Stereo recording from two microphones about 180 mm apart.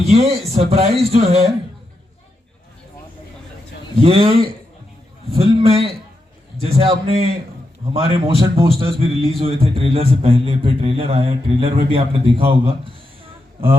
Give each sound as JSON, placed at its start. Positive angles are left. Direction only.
{"t": 0.1, "sound": "a man's voice", "side_deg": -35}
{"t": 3.9, "sound": "a man's voice", "side_deg": -30}